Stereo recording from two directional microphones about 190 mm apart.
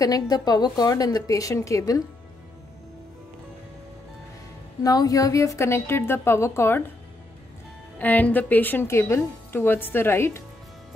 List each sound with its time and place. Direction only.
0.0 s a woman's voice: 20° left (ahead or behind)
4.8 s a woman's voice: 20° left (ahead or behind)
8.0 s a woman's voice: 10° left (ahead or behind)